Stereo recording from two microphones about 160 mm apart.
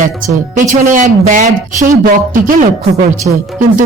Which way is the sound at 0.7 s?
55° right (ahead or behind).